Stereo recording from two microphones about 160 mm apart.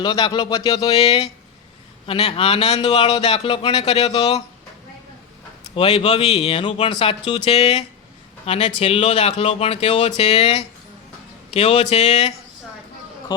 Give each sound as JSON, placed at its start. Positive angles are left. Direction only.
{"t": 0.0, "sound": "speech", "side_deg": 30}
{"t": 2.8, "sound": "speech", "side_deg": 30}
{"t": 5.7, "sound": "speech", "side_deg": 35}